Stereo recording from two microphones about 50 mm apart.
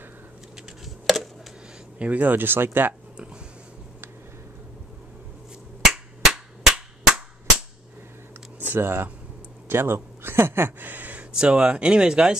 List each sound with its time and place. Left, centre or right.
0.8 s a sound: centre
2.0 s speech: right
6.2 s cap gun: centre
8.5 s speech: right
10.9 s a sound: right
11.3 s speech: centre